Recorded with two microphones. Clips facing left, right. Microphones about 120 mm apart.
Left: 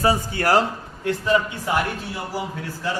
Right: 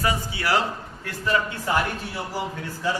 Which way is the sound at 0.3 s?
45° left (ahead or behind).